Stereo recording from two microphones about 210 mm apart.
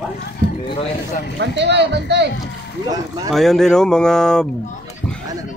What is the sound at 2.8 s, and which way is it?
Speech, 15° right (ahead or behind).